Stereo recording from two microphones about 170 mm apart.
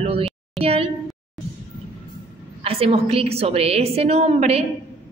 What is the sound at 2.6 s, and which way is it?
A woman's voice, 35° right (ahead or behind).